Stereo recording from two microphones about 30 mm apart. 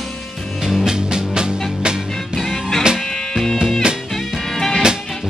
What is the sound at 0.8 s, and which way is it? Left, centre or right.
Music, right.